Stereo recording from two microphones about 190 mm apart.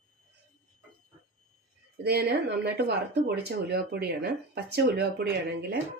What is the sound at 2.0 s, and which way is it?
Speech, 60° right (ahead or behind).